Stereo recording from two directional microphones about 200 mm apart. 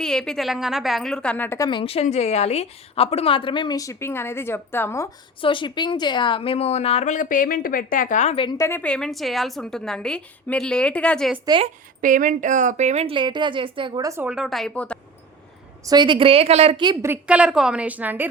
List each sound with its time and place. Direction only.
0.0 s a woman's voice: 5° left (ahead or behind)
5.4 s a woman's voice: 25° left (ahead or behind)
8.4 s a woman's voice: 15° left (ahead or behind)
11.4 s a woman's voice: 25° right (ahead or behind)
12.0 s a woman's voice: 40° right (ahead or behind); by 14.9 s 5° left (ahead or behind)
15.9 s a woman's voice: 25° right (ahead or behind)
17.1 s a woman's voice: 5° right (ahead or behind)